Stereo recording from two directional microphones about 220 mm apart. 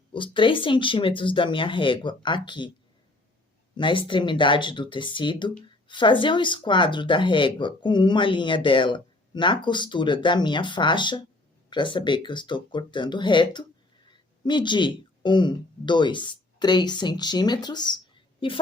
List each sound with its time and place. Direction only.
0.1 s speech: 20° left (ahead or behind)
3.8 s a woman's voice: 20° left (ahead or behind)